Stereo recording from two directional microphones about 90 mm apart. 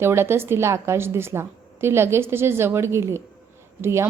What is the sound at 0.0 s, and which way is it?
A woman's voice, 30° right (ahead or behind).